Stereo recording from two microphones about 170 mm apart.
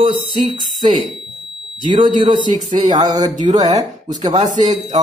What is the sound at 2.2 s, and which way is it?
Speech, 30° right (ahead or behind).